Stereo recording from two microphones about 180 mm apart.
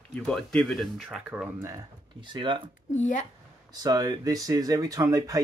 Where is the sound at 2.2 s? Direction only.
25° right (ahead or behind).